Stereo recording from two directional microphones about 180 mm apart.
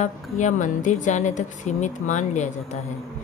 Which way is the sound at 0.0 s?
45° left (ahead or behind).